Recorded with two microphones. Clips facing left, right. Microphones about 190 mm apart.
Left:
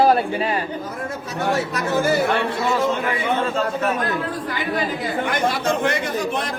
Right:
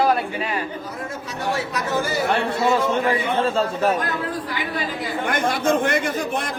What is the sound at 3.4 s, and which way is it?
Speech, 30° right (ahead or behind).